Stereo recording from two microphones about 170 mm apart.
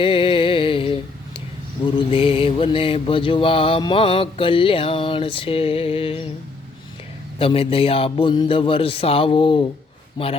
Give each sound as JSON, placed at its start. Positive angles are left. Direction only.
{"t": 0.0, "sound": "music", "side_deg": 30}
{"t": 2.0, "sound": "mantra", "side_deg": 30}
{"t": 7.3, "sound": "mantra", "side_deg": 35}